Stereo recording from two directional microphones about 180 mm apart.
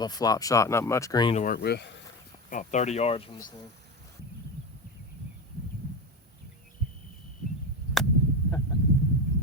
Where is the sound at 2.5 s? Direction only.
45° left (ahead or behind).